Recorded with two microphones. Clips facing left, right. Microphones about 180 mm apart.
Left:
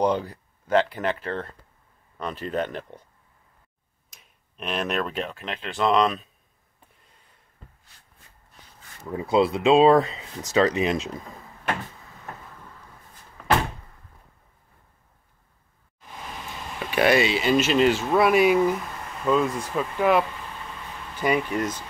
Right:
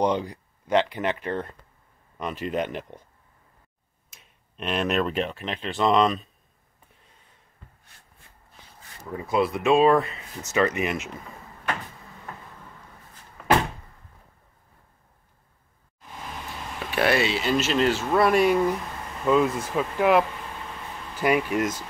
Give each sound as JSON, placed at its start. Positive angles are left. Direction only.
{"t": 0.3, "sound": "speech", "side_deg": -15}
{"t": 2.5, "sound": "speech", "side_deg": -10}
{"t": 4.1, "sound": "speech", "side_deg": 0}
{"t": 9.1, "sound": "speech", "side_deg": 30}
{"t": 10.4, "sound": "speech", "side_deg": 30}
{"t": 16.9, "sound": "speech", "side_deg": 0}